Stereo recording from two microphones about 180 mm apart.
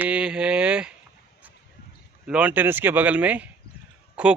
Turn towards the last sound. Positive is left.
turn(degrees=-5)  # may be behind; listen again after turning